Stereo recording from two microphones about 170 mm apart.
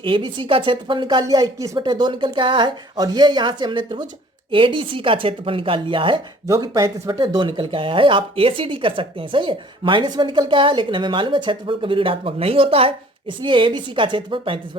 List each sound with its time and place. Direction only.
0.0 s a woman's voice: 30° right (ahead or behind)